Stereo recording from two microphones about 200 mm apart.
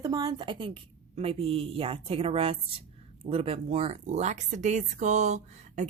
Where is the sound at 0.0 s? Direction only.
20° right (ahead or behind).